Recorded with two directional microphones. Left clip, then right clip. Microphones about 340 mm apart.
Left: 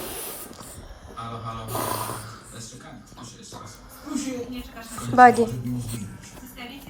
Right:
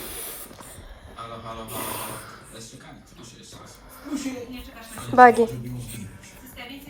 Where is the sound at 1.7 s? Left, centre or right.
Centre.